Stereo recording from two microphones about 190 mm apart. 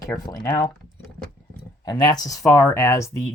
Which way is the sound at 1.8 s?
20° left (ahead or behind).